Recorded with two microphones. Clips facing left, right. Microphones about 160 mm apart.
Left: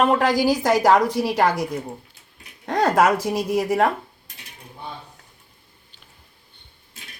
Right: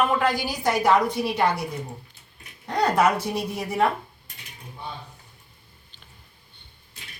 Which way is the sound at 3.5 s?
90° left.